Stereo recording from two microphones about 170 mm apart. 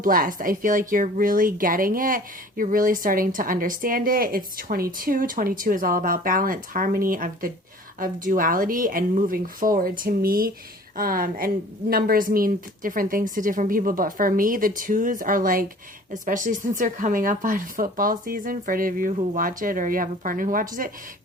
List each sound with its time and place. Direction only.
0.0 s speech: 55° right (ahead or behind)